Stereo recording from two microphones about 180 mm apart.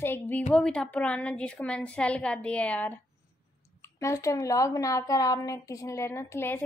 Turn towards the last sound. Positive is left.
turn(degrees=10)  # may be behind; listen again after turning